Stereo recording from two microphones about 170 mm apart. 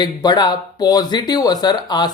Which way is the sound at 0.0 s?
25° left (ahead or behind).